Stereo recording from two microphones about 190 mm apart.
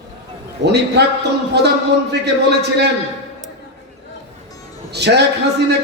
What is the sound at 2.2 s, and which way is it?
Speech, 60° right (ahead or behind).